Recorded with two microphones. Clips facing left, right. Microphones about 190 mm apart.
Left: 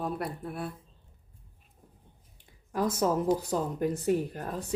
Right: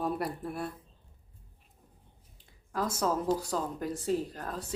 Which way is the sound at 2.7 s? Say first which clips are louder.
Left 3 dB; 15° left (ahead or behind).